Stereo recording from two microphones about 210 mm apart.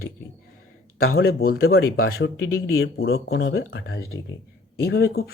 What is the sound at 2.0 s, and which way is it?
Speech, 85° left.